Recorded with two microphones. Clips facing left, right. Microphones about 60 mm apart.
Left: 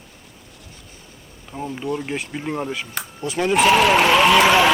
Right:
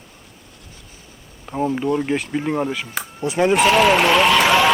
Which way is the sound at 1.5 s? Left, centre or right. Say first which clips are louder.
Right 6 dB; right.